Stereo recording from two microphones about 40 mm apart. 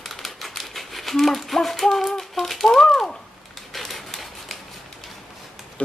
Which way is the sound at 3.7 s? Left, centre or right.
Centre.